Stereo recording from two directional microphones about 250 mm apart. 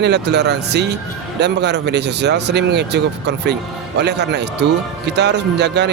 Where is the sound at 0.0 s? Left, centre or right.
Right.